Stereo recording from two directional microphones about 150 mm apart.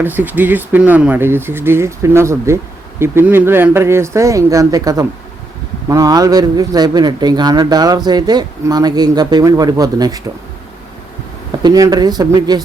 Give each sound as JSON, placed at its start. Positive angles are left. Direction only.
{"t": 0.0, "sound": "a man's voice", "side_deg": -15}
{"t": 11.6, "sound": "a man's voice", "side_deg": -25}